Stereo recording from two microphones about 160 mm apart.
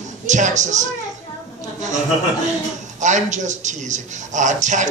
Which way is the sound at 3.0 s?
50° right (ahead or behind).